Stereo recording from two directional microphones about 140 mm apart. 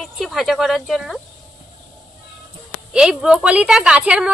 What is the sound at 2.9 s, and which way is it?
A woman's voice, 5° right (ahead or behind).